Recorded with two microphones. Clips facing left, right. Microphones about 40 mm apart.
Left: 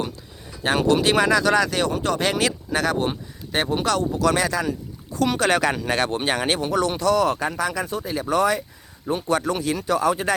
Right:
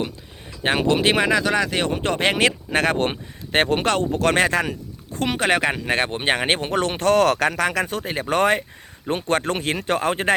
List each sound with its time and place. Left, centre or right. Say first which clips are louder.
0.6 s speech: even; right
5.3 s speech: right 1 dB; right
7.3 s speech: right 3 dB; right
8.1 s speech: right 1 dB; right